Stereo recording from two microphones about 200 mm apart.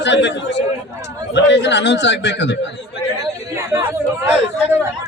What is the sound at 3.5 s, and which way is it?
Speech, 15° right (ahead or behind).